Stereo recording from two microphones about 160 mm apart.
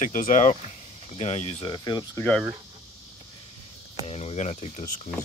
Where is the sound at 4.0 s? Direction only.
40° left (ahead or behind).